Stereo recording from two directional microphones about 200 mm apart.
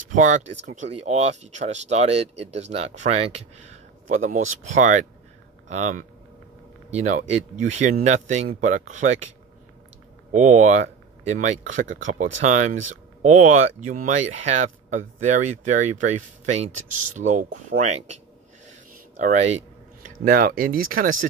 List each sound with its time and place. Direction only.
0.0 s speech: 40° right (ahead or behind)
10.3 s speech: 35° right (ahead or behind)
19.1 s speech: 35° right (ahead or behind)
20.2 s speech: 45° right (ahead or behind)